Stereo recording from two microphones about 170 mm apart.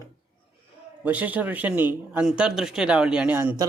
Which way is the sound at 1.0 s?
10° right (ahead or behind).